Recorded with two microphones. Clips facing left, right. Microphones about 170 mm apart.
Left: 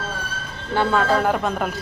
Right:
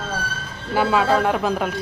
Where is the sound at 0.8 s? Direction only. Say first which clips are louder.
Right 1 dB; centre (ahead or behind).